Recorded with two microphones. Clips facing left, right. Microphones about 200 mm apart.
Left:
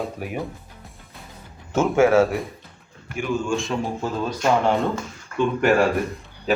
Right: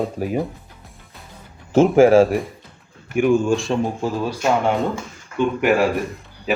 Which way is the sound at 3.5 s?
30° right (ahead or behind).